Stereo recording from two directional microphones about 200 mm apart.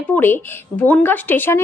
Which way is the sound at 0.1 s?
10° left (ahead or behind).